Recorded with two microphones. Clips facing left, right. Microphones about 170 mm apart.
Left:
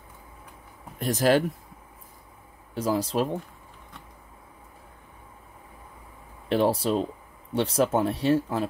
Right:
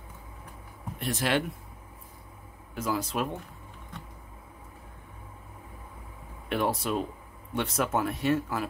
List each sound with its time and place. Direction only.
0.9 s speech: 40° left (ahead or behind)
2.7 s speech: 30° left (ahead or behind)
6.5 s speech: 30° left (ahead or behind)